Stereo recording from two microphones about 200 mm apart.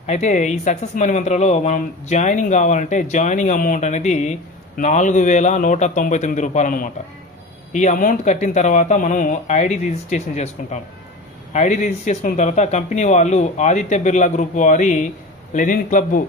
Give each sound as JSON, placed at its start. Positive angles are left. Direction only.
{"t": 0.0, "sound": "speech", "side_deg": 35}